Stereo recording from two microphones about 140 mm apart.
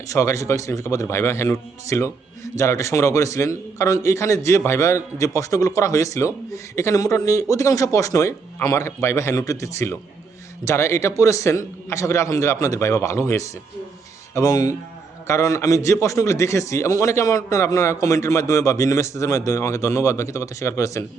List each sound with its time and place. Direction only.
0.1 s a man's voice: 20° left (ahead or behind)